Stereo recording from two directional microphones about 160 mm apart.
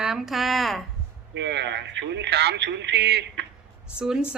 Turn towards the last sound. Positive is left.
turn(degrees=-5)  # may be behind; listen again after turning